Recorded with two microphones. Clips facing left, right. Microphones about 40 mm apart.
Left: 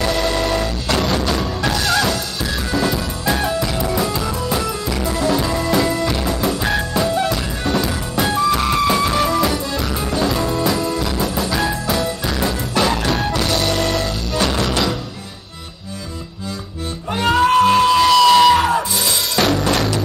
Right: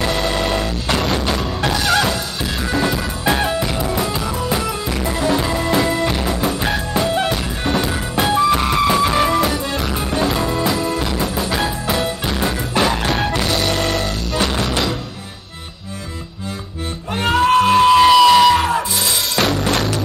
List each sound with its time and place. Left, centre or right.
0.0 s music: right
5.0 s music: right
6.2 s music: centre
7.1 s music: right
8.5 s music: centre
13.4 s music: centre
17.3 s music: centre
18.3 s music: centre